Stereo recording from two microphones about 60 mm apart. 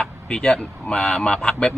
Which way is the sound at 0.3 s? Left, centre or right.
Centre.